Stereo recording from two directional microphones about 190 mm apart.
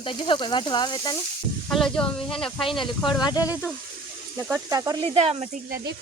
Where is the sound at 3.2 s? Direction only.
20° left (ahead or behind).